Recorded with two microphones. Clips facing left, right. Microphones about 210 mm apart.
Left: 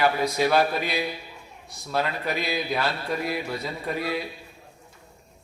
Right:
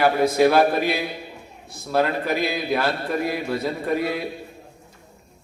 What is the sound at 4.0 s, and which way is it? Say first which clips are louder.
Speech: right 3 dB; 55° right (ahead or behind).